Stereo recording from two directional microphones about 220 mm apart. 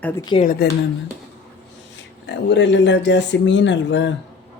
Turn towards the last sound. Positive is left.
turn(degrees=55)  # may be behind; listen again after turning